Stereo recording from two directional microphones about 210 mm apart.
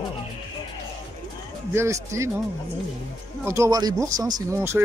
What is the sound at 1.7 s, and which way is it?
Speech, 15° right (ahead or behind).